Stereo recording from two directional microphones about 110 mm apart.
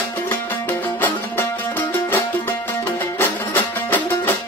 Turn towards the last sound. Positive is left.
turn(degrees=20)  # may be behind; listen again after turning